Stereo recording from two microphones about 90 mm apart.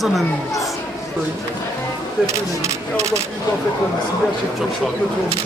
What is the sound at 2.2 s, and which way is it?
Speech, 35° right (ahead or behind).